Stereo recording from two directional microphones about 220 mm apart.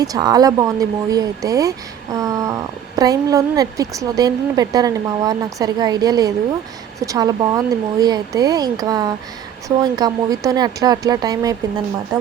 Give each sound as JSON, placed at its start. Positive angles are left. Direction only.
{"t": 0.0, "sound": "a woman's voice", "side_deg": -15}